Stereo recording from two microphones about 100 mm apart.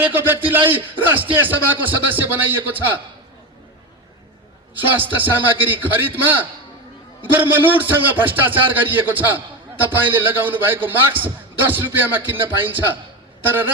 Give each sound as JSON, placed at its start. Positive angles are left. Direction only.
{"t": 0.0, "sound": "a man's voice", "side_deg": -20}
{"t": 4.7, "sound": "a man's voice", "side_deg": -20}